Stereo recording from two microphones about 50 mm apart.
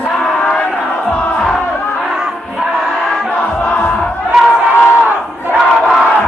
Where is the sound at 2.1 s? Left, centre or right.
Centre.